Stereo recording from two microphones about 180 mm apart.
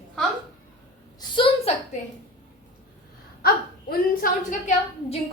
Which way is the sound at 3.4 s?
55° left (ahead or behind).